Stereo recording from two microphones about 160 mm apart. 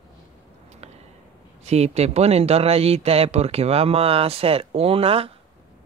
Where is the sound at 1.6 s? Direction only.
40° right (ahead or behind).